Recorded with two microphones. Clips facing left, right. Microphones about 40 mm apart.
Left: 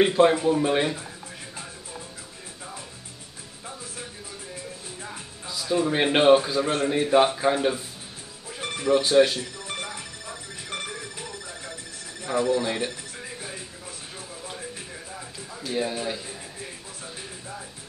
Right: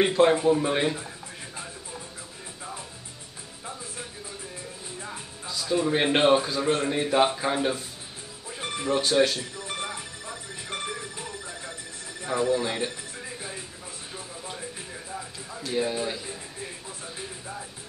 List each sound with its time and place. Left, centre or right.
0.0 s speech: centre
5.0 s music: centre
7.1 s speech: centre
8.8 s speech: centre
9.1 s speech: centre
9.6 s telephone bell ringing: centre
12.3 s telephone: centre
15.1 s a sound: centre
17.0 s music: centre